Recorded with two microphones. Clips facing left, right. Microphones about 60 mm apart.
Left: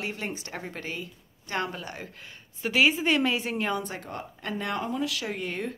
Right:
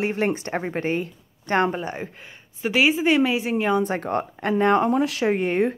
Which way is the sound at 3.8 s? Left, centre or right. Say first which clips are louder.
Right 12 dB; right.